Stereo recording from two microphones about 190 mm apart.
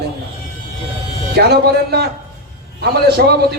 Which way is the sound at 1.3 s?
55° right (ahead or behind).